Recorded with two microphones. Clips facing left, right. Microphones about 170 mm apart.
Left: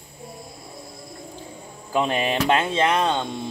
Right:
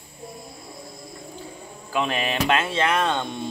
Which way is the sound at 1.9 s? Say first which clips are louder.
Left 3 dB; 20° left (ahead or behind).